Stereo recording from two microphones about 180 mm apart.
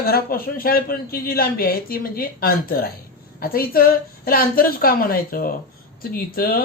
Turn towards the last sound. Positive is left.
turn(degrees=50)  # may be behind; listen again after turning